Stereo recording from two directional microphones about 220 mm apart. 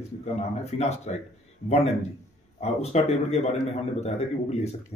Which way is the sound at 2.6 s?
30° left (ahead or behind).